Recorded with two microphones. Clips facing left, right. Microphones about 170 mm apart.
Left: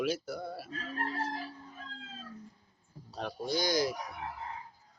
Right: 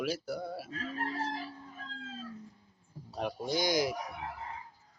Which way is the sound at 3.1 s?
10° right (ahead or behind).